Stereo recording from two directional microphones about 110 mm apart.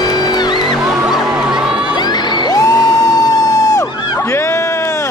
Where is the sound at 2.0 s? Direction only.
40° left (ahead or behind).